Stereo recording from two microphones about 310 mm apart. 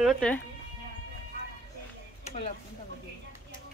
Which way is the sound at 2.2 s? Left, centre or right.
Centre.